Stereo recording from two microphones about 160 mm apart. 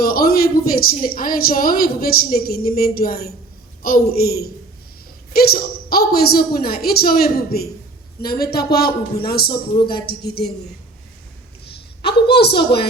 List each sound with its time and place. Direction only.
0.0 s a woman's voice: 65° left (ahead or behind)
9.5 s a man's voice: 30° left (ahead or behind)
10.1 s a woman's voice: 85° left
11.6 s a sound: 90° left